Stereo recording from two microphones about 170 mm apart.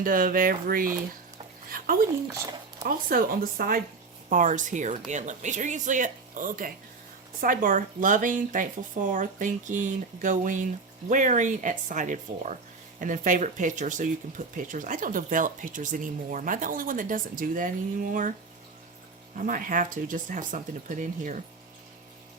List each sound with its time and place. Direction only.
0.0 s speech: 55° right (ahead or behind)
2.8 s speech: 55° right (ahead or behind)
19.4 s speech: 55° right (ahead or behind)